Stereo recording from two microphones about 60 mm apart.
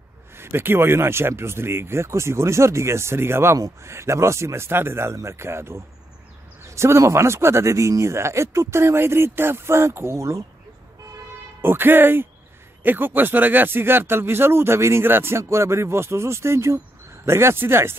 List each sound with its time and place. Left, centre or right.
0.4 s speech: right
11.6 s speech: right